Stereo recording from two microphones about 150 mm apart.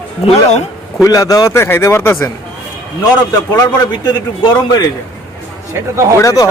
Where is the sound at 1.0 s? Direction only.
25° left (ahead or behind).